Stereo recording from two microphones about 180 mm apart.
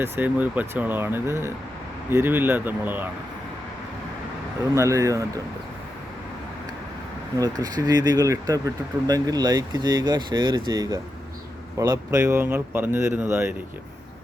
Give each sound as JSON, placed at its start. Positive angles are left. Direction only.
{"t": 0.0, "sound": "speech", "side_deg": -10}
{"t": 4.7, "sound": "speech", "side_deg": -15}
{"t": 7.6, "sound": "speech", "side_deg": -20}